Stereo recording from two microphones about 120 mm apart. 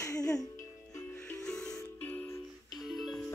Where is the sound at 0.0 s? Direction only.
30° left (ahead or behind).